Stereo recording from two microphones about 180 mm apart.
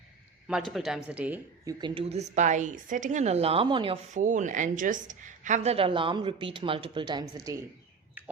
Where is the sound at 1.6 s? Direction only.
30° right (ahead or behind).